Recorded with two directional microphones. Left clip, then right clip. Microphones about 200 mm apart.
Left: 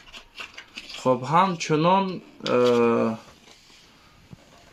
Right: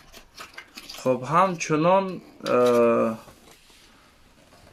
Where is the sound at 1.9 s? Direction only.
35° left (ahead or behind).